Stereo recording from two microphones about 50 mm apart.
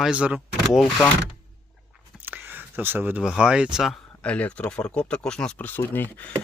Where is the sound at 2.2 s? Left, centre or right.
Right.